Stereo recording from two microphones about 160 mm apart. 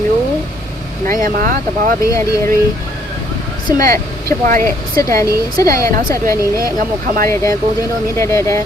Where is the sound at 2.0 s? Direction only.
20° left (ahead or behind).